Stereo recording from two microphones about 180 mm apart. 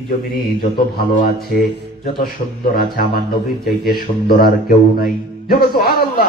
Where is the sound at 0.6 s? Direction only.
55° left (ahead or behind).